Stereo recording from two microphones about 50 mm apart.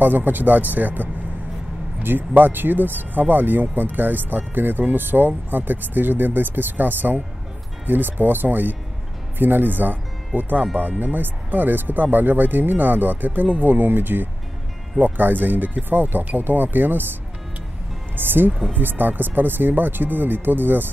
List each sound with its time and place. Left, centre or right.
0.0 s speech: right
2.0 s speech: right
18.1 s speech: right